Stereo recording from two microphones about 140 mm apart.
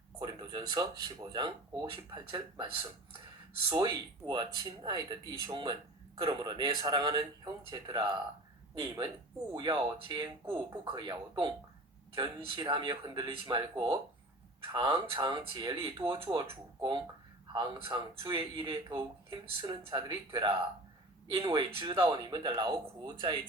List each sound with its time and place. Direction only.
0.2 s speech: 30° right (ahead or behind)
16.0 s speech: 40° right (ahead or behind)
17.5 s speech: 35° right (ahead or behind)